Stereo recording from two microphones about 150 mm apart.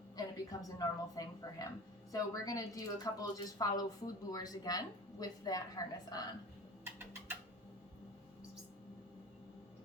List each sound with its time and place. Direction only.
0.2 s a woman's voice: 25° left (ahead or behind)